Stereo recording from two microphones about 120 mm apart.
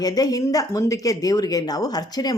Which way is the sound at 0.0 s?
30° left (ahead or behind).